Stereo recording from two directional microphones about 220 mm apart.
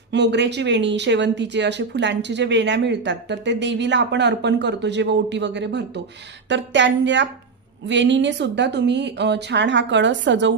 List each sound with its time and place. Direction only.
0.1 s speech: 50° right (ahead or behind)